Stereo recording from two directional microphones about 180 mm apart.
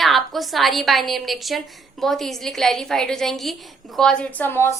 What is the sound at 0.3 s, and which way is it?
A woman's voice, centre (ahead or behind).